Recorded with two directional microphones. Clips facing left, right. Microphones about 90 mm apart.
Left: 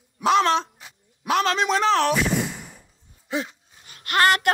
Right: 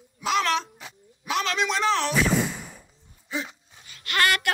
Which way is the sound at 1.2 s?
50° left (ahead or behind).